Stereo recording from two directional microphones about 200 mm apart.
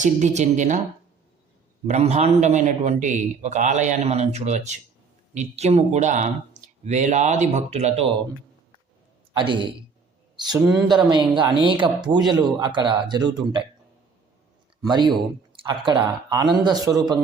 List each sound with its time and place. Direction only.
0.0 s a man's voice: 35° right (ahead or behind)
1.9 s a man's voice: 35° right (ahead or behind)
9.4 s speech: 25° right (ahead or behind)
10.3 s a sound: 20° right (ahead or behind)
10.8 s speech: 20° right (ahead or behind)
14.8 s speech: 20° right (ahead or behind)